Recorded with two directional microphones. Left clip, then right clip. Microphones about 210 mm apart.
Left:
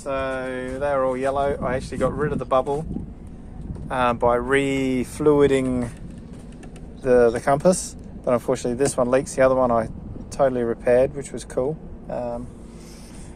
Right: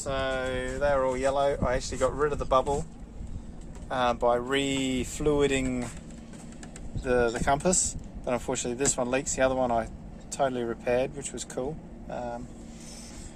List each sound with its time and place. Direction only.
0.0 s speech: 5° left (ahead or behind)
3.8 s speech: 20° left (ahead or behind)
7.0 s speech: 25° left (ahead or behind)